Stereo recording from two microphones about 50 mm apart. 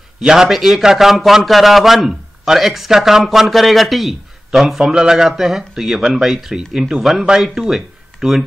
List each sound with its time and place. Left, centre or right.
0.2 s a man's voice: centre